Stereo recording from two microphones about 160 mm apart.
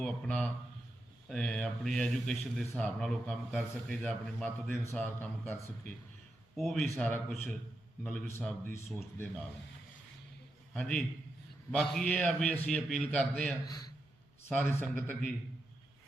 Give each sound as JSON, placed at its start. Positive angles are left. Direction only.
{"t": 0.0, "sound": "a man's voice", "side_deg": 5}
{"t": 6.6, "sound": "a man's voice", "side_deg": 0}
{"t": 10.8, "sound": "a man's voice", "side_deg": 5}
{"t": 13.7, "sound": "a man's voice", "side_deg": 25}
{"t": 14.4, "sound": "a man's voice", "side_deg": 10}